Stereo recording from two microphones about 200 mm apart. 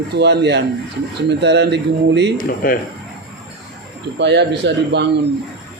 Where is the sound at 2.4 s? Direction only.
45° left (ahead or behind).